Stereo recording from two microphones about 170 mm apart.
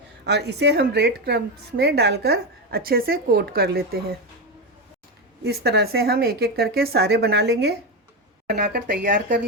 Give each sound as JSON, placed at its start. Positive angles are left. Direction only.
{"t": 0.3, "sound": "a woman's voice", "side_deg": -80}
{"t": 5.4, "sound": "a woman's voice", "side_deg": -75}
{"t": 8.4, "sound": "speech", "side_deg": -65}